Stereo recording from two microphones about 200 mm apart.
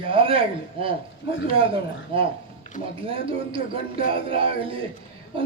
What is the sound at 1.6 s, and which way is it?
A man's voice, 25° right (ahead or behind).